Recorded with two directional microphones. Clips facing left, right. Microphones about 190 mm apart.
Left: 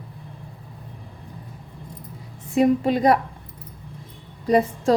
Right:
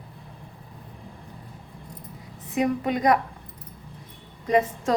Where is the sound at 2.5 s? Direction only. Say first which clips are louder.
Left 6 dB; 30° left (ahead or behind).